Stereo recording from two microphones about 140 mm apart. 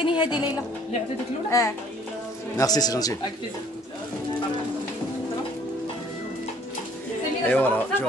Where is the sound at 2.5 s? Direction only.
25° left (ahead or behind).